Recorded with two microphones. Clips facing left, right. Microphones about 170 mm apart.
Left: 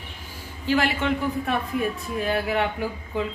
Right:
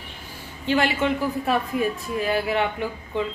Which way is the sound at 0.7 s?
Centre (ahead or behind).